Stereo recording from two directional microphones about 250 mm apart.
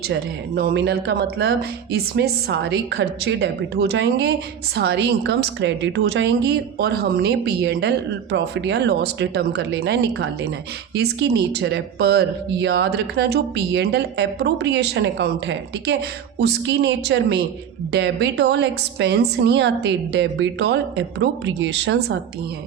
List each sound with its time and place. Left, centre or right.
0.1 s speech: right